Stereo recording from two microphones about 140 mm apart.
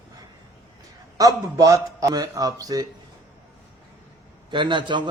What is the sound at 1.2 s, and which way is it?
A man's voice, 25° right (ahead or behind).